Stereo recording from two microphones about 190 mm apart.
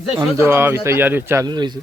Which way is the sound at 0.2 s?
15° right (ahead or behind).